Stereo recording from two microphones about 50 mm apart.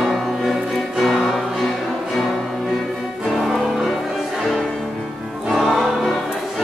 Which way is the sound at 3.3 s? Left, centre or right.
Centre.